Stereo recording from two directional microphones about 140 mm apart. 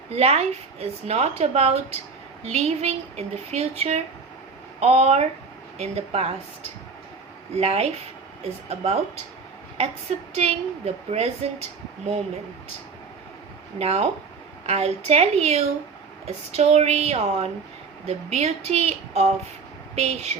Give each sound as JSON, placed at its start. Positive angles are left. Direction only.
{"t": 0.1, "sound": "a woman's voice", "side_deg": -50}
{"t": 10.3, "sound": "a woman's voice", "side_deg": -50}
{"t": 13.7, "sound": "a woman's voice", "side_deg": -50}